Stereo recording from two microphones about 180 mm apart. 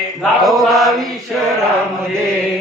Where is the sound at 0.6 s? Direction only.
Centre (ahead or behind).